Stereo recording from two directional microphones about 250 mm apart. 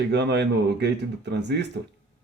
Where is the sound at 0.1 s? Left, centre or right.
Right.